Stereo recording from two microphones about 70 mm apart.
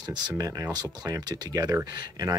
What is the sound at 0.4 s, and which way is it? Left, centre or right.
Speech, right.